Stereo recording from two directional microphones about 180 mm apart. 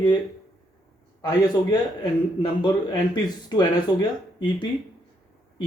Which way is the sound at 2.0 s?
25° left (ahead or behind).